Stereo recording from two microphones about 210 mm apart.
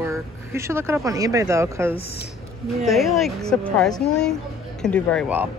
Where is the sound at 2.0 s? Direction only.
50° left (ahead or behind).